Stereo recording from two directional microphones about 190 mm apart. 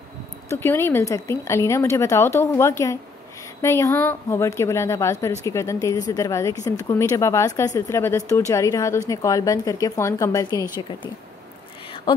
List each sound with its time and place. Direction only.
0.5 s speech: 10° left (ahead or behind)